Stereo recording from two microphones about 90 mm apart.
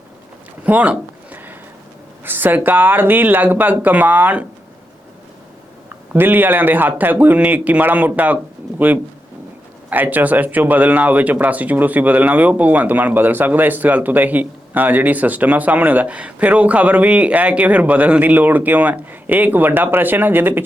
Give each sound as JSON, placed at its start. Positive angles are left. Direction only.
{"t": 0.6, "sound": "a sound", "side_deg": -15}
{"t": 2.2, "sound": "speech", "side_deg": -20}
{"t": 6.1, "sound": "speech", "side_deg": -20}
{"t": 9.9, "sound": "speech", "side_deg": -20}